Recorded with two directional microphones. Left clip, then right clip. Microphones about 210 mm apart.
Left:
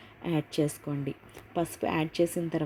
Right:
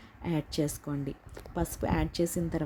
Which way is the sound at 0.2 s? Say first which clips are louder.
Left 3 dB; 5° right (ahead or behind).